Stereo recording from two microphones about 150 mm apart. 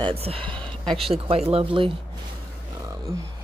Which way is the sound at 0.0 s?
40° right (ahead or behind).